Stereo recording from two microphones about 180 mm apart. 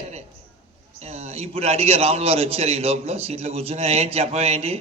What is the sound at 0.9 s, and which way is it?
A man's voice, 35° right (ahead or behind).